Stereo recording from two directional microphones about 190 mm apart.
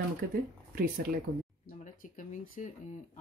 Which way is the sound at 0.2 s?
50° right (ahead or behind).